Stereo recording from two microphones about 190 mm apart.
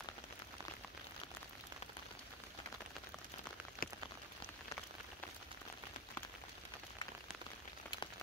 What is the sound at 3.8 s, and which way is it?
Rain on surface, 50° left (ahead or behind).